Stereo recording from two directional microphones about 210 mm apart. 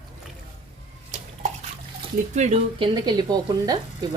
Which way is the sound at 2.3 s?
30° right (ahead or behind).